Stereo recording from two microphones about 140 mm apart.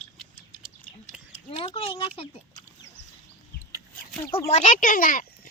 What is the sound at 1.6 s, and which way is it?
Speech, 40° left (ahead or behind).